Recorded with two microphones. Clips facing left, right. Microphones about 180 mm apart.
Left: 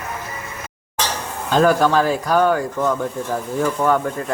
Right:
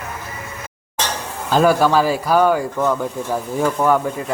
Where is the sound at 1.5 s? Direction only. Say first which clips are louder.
Right 1 dB; 10° right (ahead or behind).